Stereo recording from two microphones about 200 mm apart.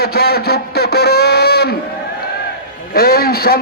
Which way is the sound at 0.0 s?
50° left (ahead or behind).